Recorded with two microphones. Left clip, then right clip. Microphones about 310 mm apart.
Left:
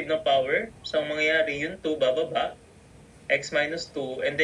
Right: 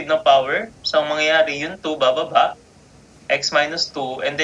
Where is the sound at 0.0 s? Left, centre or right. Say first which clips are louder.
Right 8 dB; right.